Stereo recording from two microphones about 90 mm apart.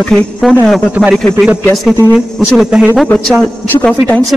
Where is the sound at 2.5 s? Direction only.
5° right (ahead or behind).